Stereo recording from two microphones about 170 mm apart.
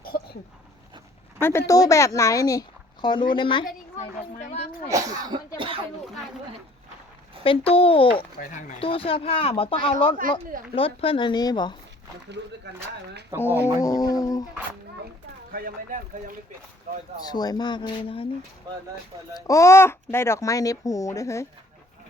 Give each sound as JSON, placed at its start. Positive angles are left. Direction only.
{"t": 0.1, "sound": "dog", "side_deg": 70}
{"t": 1.4, "sound": "speech", "side_deg": 15}
{"t": 3.9, "sound": "speech", "side_deg": 45}
{"t": 4.9, "sound": "speech", "side_deg": -20}
{"t": 5.5, "sound": "speech", "side_deg": -30}
{"t": 7.4, "sound": "speech", "side_deg": 35}
{"t": 13.4, "sound": "speech", "side_deg": 15}
{"t": 15.5, "sound": "speech", "side_deg": -60}
{"t": 17.2, "sound": "speech", "side_deg": 25}
{"t": 19.3, "sound": "speech", "side_deg": 20}